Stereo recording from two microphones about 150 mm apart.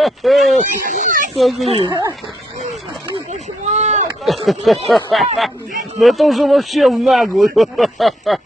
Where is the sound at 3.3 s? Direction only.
50° right (ahead or behind).